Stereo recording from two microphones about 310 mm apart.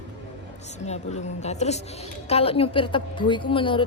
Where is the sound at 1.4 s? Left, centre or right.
Left.